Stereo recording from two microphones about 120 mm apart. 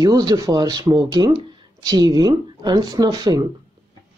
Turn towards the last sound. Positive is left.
turn(degrees=-30)  # may be behind; listen again after turning